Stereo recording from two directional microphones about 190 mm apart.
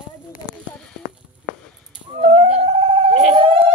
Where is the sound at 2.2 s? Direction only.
30° right (ahead or behind).